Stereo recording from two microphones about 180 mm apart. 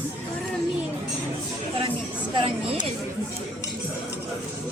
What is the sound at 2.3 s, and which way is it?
Speech, 30° right (ahead or behind).